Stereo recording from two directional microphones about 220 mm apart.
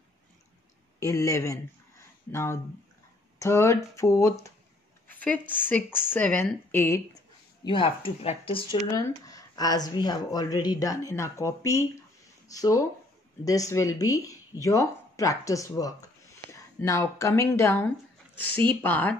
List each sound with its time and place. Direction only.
0.9 s speech: 15° left (ahead or behind)
5.1 s a sound: 5° left (ahead or behind)
5.9 s speech: 10° left (ahead or behind)
7.6 s speech: 25° left (ahead or behind); by 19.1 s 10° left (ahead or behind)